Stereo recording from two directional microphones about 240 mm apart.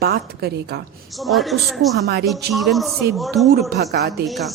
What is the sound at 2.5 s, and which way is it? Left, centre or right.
A woman's voice, centre.